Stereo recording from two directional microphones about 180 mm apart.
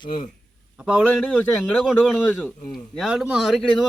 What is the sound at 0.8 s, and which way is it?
Speech, 5° right (ahead or behind).